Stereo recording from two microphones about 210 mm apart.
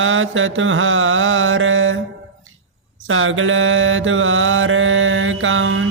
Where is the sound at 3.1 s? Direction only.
70° right (ahead or behind).